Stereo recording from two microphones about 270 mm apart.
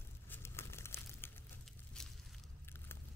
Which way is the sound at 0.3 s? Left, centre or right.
Centre.